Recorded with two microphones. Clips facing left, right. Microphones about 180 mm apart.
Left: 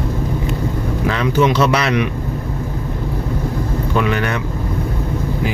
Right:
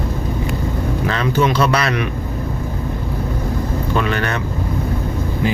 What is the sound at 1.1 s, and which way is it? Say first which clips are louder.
Speech: left 2 dB; 15° left (ahead or behind).